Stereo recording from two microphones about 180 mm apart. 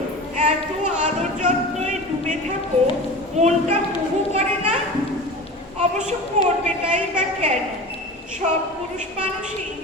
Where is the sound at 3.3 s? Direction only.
40° right (ahead or behind).